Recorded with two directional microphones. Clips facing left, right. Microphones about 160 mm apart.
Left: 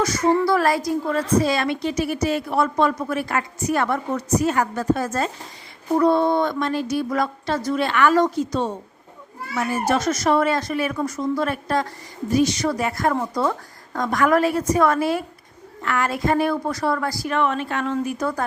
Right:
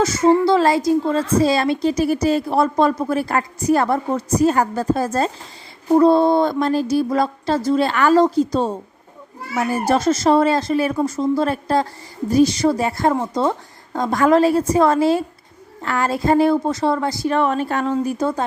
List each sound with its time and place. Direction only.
0.0 s a woman's voice: 25° right (ahead or behind)